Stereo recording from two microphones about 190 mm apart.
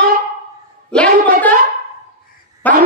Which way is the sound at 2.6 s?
10° left (ahead or behind).